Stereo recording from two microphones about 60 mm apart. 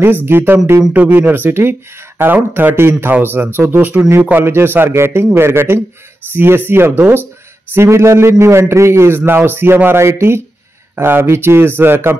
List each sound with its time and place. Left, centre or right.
0.0 s a man's voice: right